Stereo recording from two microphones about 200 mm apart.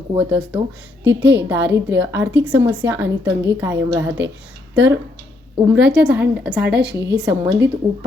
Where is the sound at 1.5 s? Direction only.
10° right (ahead or behind).